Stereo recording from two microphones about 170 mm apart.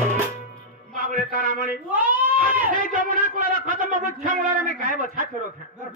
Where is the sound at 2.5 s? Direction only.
50° right (ahead or behind).